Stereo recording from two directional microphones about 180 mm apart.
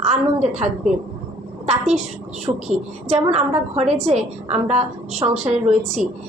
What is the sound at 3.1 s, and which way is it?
A woman's voice, 40° right (ahead or behind).